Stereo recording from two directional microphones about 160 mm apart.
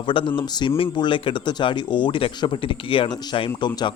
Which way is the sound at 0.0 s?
30° left (ahead or behind).